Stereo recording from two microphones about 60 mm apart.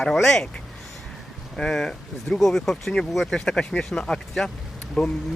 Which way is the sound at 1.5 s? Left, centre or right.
Centre.